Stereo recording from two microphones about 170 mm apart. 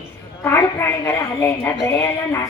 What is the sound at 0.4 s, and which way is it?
A woman's voice, 15° left (ahead or behind).